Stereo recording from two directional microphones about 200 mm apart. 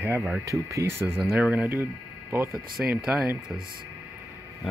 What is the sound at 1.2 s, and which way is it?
Speech, 5° right (ahead or behind).